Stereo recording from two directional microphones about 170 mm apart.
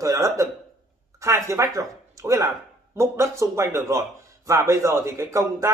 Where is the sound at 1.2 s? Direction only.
20° right (ahead or behind).